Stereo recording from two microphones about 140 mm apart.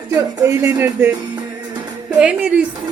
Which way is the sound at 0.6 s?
10° right (ahead or behind).